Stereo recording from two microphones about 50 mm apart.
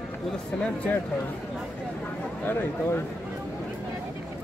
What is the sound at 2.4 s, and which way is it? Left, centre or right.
Speech, left.